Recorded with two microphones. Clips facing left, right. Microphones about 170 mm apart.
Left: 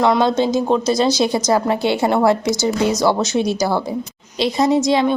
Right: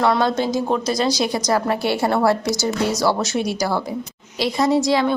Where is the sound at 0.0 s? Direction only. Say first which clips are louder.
Left 3 dB; 20° left (ahead or behind).